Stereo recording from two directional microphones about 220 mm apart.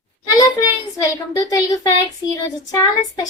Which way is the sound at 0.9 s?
15° left (ahead or behind).